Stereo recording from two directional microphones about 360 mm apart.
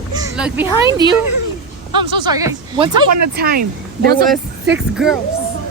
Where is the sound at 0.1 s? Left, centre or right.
Centre.